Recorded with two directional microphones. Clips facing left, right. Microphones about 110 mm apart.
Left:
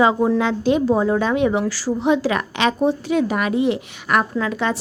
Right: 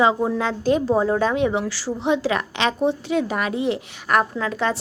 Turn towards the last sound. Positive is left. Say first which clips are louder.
# left 2 dB
turn(degrees=-35)  # may be behind; listen again after turning